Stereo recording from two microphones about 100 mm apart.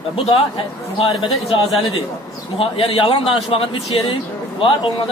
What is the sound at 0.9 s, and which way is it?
A man's voice, 60° left (ahead or behind).